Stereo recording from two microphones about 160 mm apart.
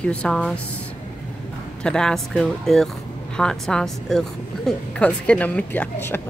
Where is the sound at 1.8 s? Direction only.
5° left (ahead or behind).